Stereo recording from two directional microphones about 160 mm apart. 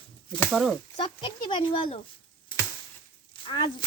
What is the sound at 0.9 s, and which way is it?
Speech, 30° left (ahead or behind).